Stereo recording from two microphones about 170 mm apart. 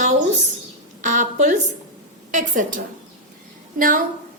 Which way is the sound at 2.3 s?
50° right (ahead or behind).